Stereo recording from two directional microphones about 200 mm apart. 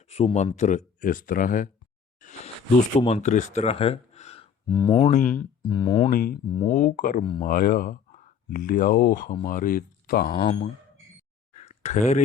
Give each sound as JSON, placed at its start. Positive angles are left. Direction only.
{"t": 0.1, "sound": "speech", "side_deg": 30}
{"t": 2.2, "sound": "a sound", "side_deg": 40}
{"t": 2.9, "sound": "speech", "side_deg": 25}
{"t": 6.1, "sound": "mantra", "side_deg": 45}
{"t": 6.7, "sound": "speech", "side_deg": 40}
{"t": 10.4, "sound": "speech", "side_deg": 30}
{"t": 11.5, "sound": "a sound", "side_deg": 35}